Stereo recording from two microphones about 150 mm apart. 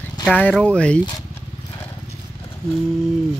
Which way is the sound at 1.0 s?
20° left (ahead or behind).